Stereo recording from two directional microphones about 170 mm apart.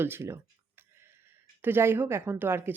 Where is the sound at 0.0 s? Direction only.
15° right (ahead or behind).